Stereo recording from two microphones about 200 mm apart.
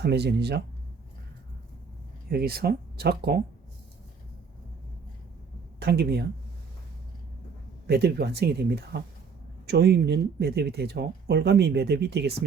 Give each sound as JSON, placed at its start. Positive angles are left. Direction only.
{"t": 0.0, "sound": "speech", "side_deg": -55}
{"t": 2.3, "sound": "speech", "side_deg": -50}
{"t": 5.8, "sound": "speech", "side_deg": -55}
{"t": 7.9, "sound": "speech", "side_deg": -55}